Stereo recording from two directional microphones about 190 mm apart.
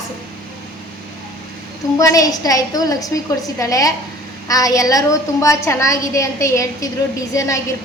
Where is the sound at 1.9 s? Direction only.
15° left (ahead or behind).